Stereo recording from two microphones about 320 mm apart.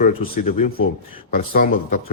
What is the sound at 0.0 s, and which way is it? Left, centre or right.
Speech, centre.